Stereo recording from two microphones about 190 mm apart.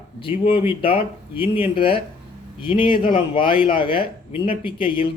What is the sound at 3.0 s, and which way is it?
A man's voice, 25° left (ahead or behind).